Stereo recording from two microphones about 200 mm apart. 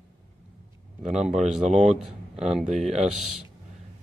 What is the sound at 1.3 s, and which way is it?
Speech, 35° right (ahead or behind).